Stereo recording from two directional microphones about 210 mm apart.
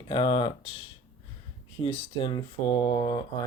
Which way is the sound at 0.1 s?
25° left (ahead or behind).